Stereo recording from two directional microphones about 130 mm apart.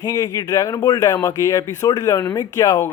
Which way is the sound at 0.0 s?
30° left (ahead or behind).